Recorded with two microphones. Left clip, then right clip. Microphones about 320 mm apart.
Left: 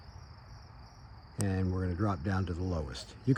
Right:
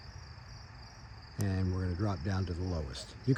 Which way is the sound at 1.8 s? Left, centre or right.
Left.